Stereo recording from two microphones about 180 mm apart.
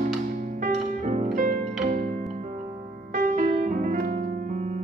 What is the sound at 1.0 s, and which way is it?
Music, 40° right (ahead or behind).